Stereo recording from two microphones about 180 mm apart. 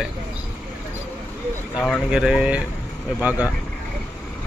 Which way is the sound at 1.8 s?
Centre (ahead or behind).